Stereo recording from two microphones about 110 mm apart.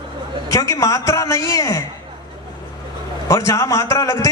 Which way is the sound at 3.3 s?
30° left (ahead or behind).